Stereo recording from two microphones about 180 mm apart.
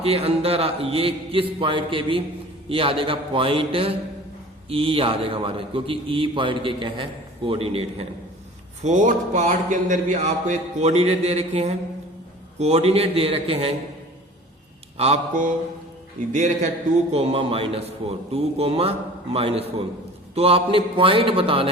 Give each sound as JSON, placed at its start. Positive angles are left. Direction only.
{"t": 0.0, "sound": "a man's voice", "side_deg": -35}
{"t": 8.8, "sound": "a man's voice", "side_deg": -45}
{"t": 14.9, "sound": "a man's voice", "side_deg": -35}